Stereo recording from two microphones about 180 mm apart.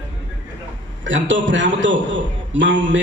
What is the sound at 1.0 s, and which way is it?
A woman's voice, 90° right.